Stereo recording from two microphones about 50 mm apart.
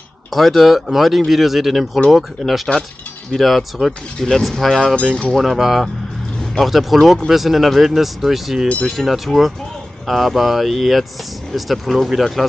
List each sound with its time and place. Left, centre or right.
0.3 s speech: centre
5.4 s speech: centre